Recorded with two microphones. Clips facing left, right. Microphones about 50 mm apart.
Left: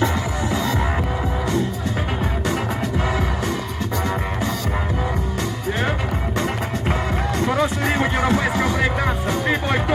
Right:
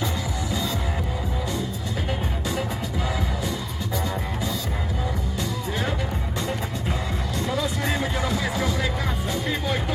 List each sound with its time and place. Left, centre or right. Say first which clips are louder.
7.3 s music: left 6 dB; left